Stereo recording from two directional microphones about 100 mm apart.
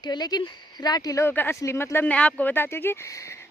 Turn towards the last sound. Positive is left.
turn(degrees=25)  # may be behind; listen again after turning